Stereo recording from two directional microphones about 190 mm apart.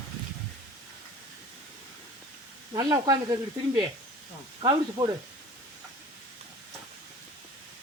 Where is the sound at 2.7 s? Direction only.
20° right (ahead or behind).